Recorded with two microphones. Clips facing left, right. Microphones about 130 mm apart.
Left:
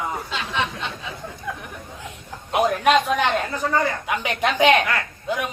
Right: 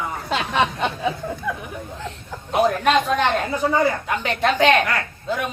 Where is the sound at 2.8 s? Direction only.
10° left (ahead or behind).